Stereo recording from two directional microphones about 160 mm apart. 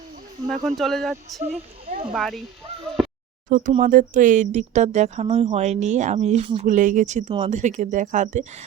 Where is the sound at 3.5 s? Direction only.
50° right (ahead or behind).